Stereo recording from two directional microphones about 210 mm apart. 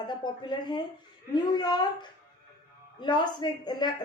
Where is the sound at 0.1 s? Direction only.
20° left (ahead or behind).